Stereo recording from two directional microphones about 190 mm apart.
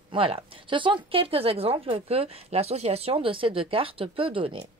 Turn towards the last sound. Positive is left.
turn(degrees=-30)  # may be behind; listen again after turning